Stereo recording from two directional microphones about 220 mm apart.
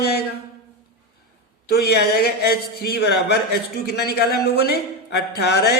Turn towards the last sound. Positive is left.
turn(degrees=50)  # may be behind; listen again after turning